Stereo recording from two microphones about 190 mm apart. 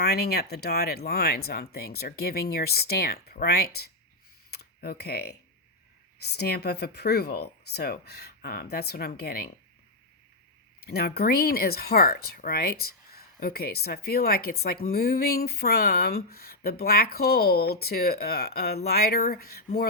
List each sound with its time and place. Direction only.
0.0 s speech: 60° left (ahead or behind)
10.8 s speech: 55° left (ahead or behind)